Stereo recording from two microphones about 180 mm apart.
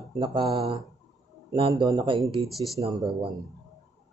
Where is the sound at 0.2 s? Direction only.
30° right (ahead or behind).